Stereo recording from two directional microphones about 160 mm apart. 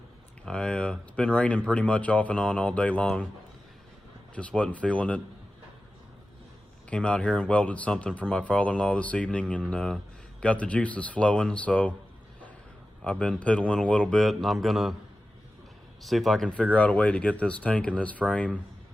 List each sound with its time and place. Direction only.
0.4 s speech: 5° left (ahead or behind)
4.4 s speech: 10° left (ahead or behind)
6.9 s speech: 5° left (ahead or behind)
13.0 s speech: 5° left (ahead or behind)
14.1 s mantra: centre (ahead or behind)
16.0 s speech: centre (ahead or behind)